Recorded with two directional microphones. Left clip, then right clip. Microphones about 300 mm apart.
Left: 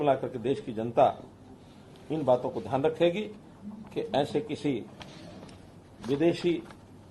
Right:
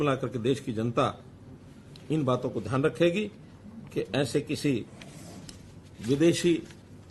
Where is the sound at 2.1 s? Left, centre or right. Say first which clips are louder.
Left 2 dB; right.